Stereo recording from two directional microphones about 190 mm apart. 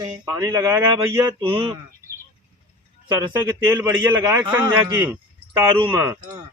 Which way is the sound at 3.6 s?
10° right (ahead or behind).